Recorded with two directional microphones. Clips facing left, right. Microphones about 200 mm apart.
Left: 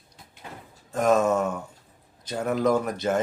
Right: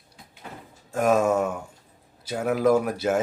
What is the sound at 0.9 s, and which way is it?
Speech, 10° right (ahead or behind).